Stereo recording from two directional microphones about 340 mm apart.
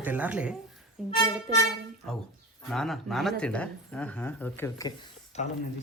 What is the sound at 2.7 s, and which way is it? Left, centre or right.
Speech, centre.